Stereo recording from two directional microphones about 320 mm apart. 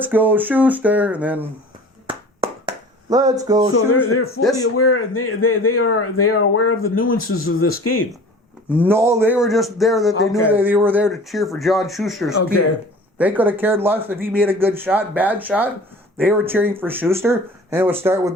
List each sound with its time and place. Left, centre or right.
0.0 s speech: centre
2.0 s a sound: centre
4.4 s speech: left
8.7 s speech: centre